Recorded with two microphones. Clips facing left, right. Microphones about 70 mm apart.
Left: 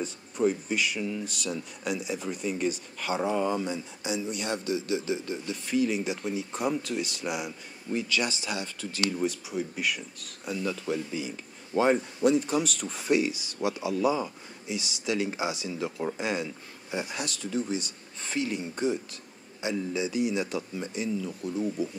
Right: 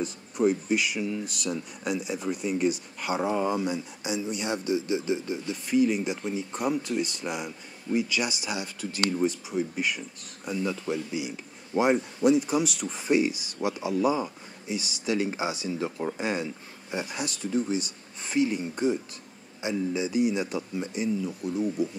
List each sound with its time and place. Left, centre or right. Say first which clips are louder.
0.0 s speech: right 2 dB; centre; by 5.4 s right
5.7 s speech: right 3 dB; centre
7.9 s speech: right 2 dB; centre
9.1 s speech: right 3 dB; centre
10.6 s speech: right 1 dB; centre
13.7 s speech: right 1 dB; right
20.7 s speech: right 3 dB; centre